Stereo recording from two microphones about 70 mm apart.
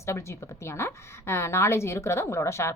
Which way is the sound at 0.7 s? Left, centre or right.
Left.